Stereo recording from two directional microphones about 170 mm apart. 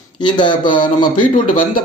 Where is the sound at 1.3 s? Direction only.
50° left (ahead or behind).